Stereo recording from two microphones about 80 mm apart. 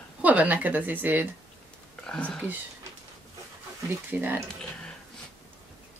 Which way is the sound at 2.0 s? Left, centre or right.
Centre.